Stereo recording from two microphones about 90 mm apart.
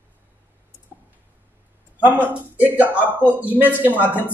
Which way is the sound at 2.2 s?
20° right (ahead or behind).